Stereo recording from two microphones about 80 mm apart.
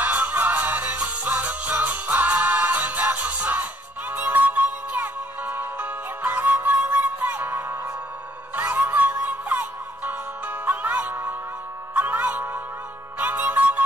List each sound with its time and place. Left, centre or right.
0.0 s music: centre